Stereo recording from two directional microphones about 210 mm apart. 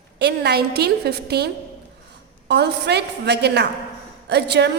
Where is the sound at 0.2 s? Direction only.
50° right (ahead or behind).